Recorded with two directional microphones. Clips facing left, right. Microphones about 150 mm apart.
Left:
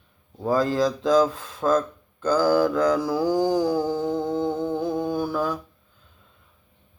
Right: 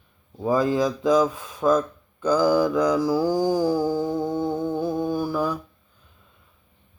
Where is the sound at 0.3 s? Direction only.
5° right (ahead or behind).